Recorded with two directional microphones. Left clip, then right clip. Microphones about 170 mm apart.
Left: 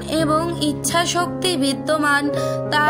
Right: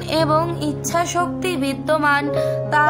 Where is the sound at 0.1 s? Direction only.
35° left (ahead or behind).